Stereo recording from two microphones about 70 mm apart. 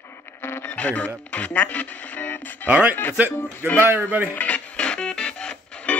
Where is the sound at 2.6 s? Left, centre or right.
Right.